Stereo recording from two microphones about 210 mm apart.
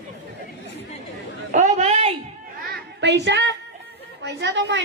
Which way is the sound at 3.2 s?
55° right (ahead or behind).